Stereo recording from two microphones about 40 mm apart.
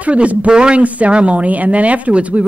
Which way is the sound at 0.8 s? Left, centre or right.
Right.